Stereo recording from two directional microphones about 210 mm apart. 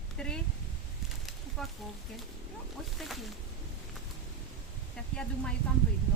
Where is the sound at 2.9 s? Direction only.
Centre (ahead or behind).